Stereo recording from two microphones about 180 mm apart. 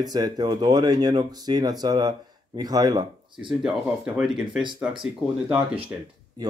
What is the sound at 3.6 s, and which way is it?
Speech, centre (ahead or behind).